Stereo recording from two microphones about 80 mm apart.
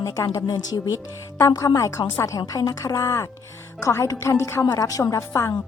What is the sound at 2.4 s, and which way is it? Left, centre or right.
A woman's voice, left.